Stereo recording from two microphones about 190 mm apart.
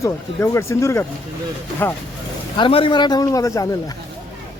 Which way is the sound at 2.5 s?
25° left (ahead or behind).